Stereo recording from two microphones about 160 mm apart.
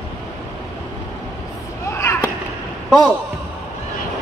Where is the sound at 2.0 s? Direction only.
15° left (ahead or behind).